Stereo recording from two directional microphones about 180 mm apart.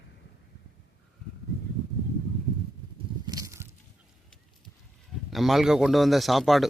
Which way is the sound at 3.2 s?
20° right (ahead or behind).